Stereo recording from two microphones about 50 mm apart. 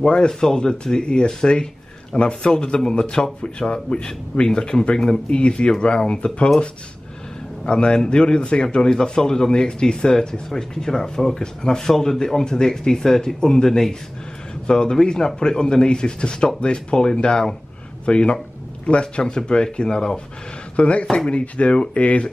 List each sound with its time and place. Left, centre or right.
0.0 s speech: centre
7.6 s speech: centre
20.7 s speech: left